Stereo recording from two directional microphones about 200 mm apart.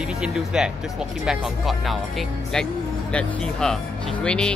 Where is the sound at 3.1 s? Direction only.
5° left (ahead or behind).